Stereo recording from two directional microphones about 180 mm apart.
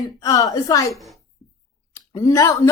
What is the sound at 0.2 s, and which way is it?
A woman's voice, 20° left (ahead or behind).